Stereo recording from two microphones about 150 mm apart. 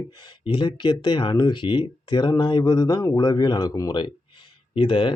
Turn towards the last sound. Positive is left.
turn(degrees=35)  # may be behind; listen again after turning